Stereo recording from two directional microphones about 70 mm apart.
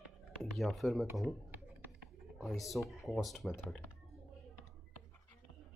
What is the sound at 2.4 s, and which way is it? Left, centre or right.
Speech, centre.